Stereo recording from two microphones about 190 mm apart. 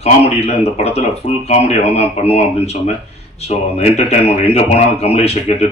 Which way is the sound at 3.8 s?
30° left (ahead or behind).